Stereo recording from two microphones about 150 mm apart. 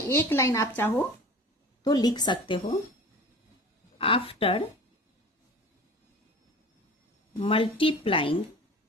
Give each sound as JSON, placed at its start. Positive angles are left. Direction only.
{"t": 0.1, "sound": "a woman's voice", "side_deg": 15}
{"t": 1.8, "sound": "a woman's voice", "side_deg": 25}
{"t": 3.9, "sound": "a woman's voice", "side_deg": 35}
{"t": 7.3, "sound": "a woman's voice", "side_deg": 40}